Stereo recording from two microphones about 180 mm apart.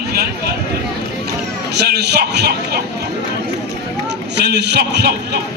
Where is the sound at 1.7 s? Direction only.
65° right (ahead or behind).